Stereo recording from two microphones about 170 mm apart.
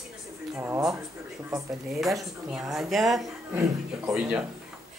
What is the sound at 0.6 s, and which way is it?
Speech, 15° right (ahead or behind).